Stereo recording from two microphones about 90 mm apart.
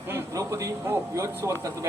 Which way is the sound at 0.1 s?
30° right (ahead or behind).